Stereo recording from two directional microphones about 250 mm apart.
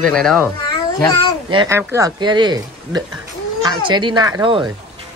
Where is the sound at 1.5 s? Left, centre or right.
Centre.